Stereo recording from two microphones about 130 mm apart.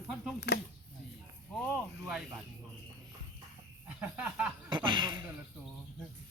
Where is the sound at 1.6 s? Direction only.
Centre (ahead or behind).